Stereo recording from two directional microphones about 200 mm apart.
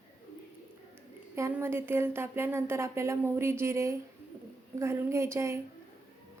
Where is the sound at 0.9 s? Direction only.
15° right (ahead or behind).